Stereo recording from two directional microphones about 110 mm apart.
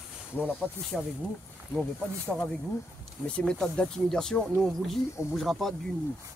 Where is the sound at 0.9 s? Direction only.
10° left (ahead or behind).